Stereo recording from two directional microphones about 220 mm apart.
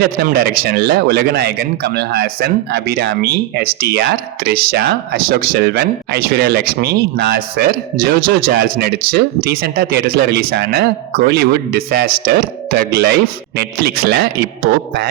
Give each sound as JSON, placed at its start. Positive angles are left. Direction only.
{"t": 0.2, "sound": "a man's voice", "side_deg": -45}